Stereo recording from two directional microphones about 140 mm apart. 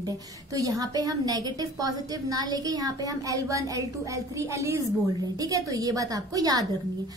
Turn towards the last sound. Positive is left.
turn(degrees=-25)  # may be behind; listen again after turning